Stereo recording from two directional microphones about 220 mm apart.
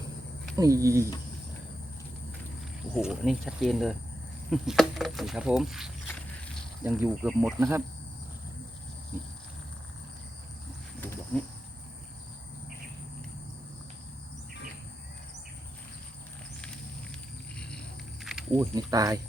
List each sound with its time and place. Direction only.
0.5 s speech: 15° right (ahead or behind)
2.9 s speech: centre (ahead or behind)
9.1 s a sound: 10° right (ahead or behind)
11.0 s insect: 10° left (ahead or behind)
17.6 s snake: 5° left (ahead or behind)
18.7 s speech: 15° right (ahead or behind)